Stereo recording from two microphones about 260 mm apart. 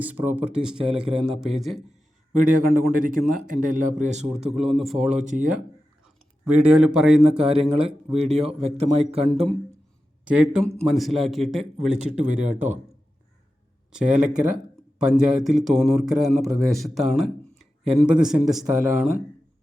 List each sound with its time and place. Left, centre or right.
0.0 s speech: centre
2.4 s speech: right
4.8 s speech: centre
5.0 s speech: right
6.4 s speech: centre
7.3 s speech: right
9.3 s speech: centre
12.2 s speech: right
13.9 s speech: centre